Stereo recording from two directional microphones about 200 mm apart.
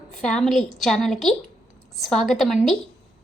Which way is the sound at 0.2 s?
Centre (ahead or behind).